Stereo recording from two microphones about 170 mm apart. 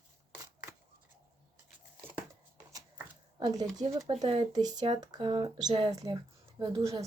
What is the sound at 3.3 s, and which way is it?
Speech, 25° right (ahead or behind).